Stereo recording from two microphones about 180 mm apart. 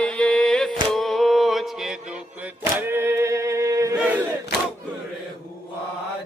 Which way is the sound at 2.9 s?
15° right (ahead or behind).